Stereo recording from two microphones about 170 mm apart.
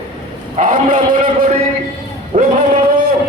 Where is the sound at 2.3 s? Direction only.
40° right (ahead or behind).